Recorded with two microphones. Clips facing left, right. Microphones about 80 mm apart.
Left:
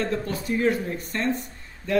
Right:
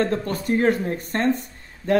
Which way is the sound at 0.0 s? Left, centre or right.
Right.